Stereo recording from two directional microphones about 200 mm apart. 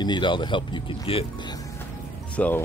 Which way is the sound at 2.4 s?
10° left (ahead or behind).